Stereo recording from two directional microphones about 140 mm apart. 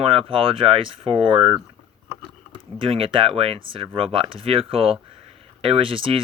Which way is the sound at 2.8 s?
40° right (ahead or behind).